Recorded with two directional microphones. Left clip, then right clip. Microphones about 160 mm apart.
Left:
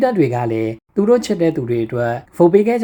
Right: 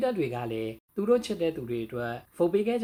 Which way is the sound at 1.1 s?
35° left (ahead or behind).